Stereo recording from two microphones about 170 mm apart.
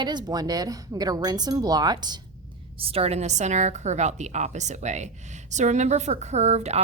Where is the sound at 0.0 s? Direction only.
25° right (ahead or behind).